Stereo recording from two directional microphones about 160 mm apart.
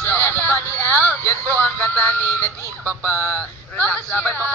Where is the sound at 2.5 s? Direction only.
20° right (ahead or behind).